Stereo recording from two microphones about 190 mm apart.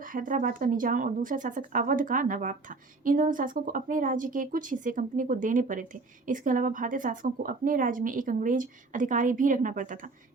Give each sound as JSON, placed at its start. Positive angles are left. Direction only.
{"t": 0.0, "sound": "speech", "side_deg": -45}